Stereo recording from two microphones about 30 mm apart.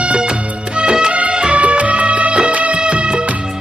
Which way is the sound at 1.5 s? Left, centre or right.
Right.